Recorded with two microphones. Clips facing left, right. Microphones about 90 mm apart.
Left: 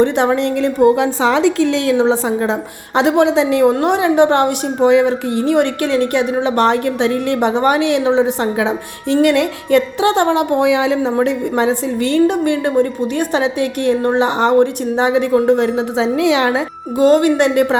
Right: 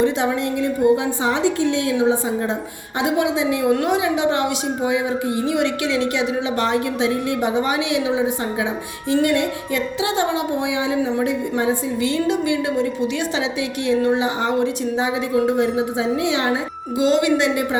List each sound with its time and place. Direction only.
0.0 s a woman's voice: 60° left (ahead or behind)
5.5 s a woman's voice: 55° left (ahead or behind); by 9.1 s 70° left (ahead or behind)
9.2 s a woman's voice: 85° left
17.0 s a woman's voice: 50° left (ahead or behind)